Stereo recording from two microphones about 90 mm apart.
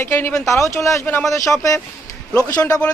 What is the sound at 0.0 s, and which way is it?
Speech, 25° left (ahead or behind).